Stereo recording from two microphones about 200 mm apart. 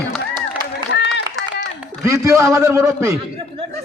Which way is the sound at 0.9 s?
60° left (ahead or behind).